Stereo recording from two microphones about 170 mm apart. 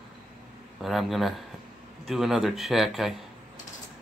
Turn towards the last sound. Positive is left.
turn(degrees=0)  # may be behind; listen again after turning